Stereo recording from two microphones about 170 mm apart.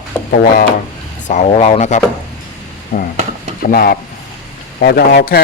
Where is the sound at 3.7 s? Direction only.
60° left (ahead or behind).